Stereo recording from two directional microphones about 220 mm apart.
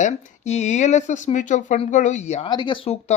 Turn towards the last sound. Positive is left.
turn(degrees=25)  # may be behind; listen again after turning